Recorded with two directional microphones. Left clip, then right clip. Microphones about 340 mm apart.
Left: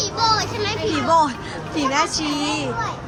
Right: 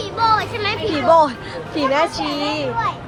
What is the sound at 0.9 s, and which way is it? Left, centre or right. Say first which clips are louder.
Speech: right 4 dB; centre.